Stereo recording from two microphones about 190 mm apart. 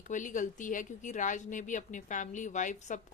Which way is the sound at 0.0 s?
40° left (ahead or behind).